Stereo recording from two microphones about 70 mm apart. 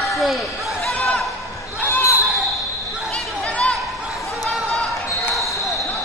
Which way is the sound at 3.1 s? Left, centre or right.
Centre.